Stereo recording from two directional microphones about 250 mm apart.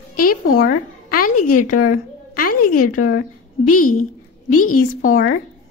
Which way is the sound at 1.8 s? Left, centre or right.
Left.